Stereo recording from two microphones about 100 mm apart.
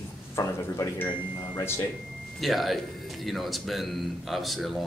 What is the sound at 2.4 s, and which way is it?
Speech, centre (ahead or behind).